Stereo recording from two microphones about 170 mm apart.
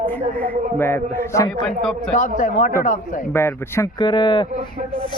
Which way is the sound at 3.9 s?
25° left (ahead or behind).